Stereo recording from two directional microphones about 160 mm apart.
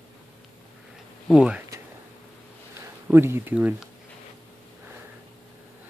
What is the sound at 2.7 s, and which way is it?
Speech, 15° right (ahead or behind).